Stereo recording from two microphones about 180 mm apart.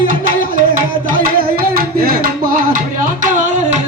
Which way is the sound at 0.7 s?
50° right (ahead or behind).